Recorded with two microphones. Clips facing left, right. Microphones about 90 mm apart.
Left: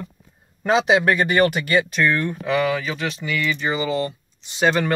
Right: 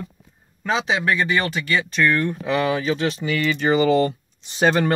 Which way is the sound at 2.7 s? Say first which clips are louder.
Right 2 dB; 35° right (ahead or behind).